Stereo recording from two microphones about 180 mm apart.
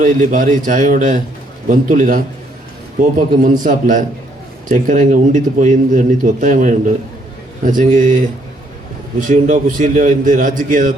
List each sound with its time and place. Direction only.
0.0 s a man's voice: 45° right (ahead or behind)
9.1 s a man's voice: 45° right (ahead or behind)